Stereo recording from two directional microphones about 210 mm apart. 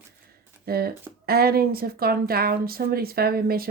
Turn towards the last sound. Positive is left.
turn(degrees=-45)  # may be behind; listen again after turning